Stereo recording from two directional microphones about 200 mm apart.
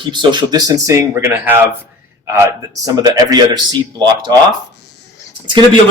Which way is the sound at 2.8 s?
20° right (ahead or behind).